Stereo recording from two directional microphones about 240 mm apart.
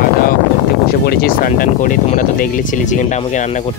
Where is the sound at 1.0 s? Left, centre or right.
Left.